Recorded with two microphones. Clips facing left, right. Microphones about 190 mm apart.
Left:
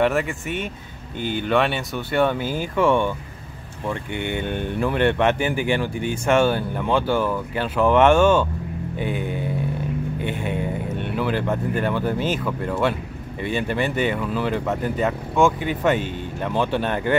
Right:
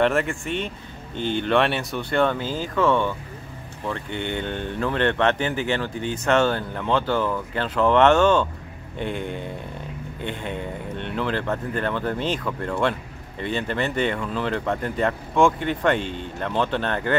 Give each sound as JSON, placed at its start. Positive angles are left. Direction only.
{"t": 0.0, "sound": "speech", "side_deg": 0}